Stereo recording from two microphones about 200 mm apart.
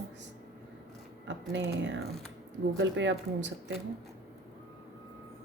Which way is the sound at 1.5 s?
65° right (ahead or behind).